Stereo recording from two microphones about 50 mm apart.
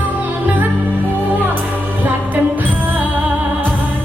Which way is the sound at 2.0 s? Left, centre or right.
Right.